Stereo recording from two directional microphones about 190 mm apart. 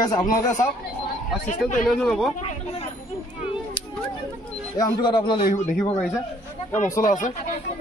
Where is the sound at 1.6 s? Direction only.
Centre (ahead or behind).